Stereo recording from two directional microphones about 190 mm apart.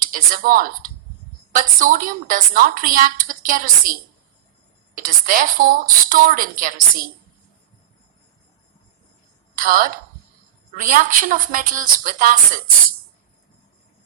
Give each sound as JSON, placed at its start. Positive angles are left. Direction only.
{"t": 0.0, "sound": "a woman's voice", "side_deg": -45}
{"t": 4.9, "sound": "a woman's voice", "side_deg": -45}
{"t": 9.6, "sound": "a woman's voice", "side_deg": -45}